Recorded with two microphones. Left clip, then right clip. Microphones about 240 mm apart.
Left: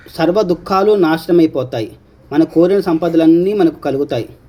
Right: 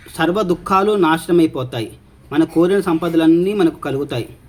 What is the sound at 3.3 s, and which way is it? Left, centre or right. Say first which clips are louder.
Speech: left 2 dB; right.